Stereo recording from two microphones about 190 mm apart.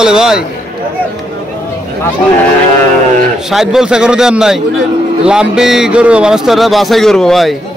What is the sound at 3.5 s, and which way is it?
Speech, centre (ahead or behind).